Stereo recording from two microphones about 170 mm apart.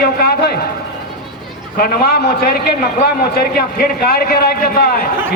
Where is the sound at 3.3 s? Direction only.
60° left (ahead or behind).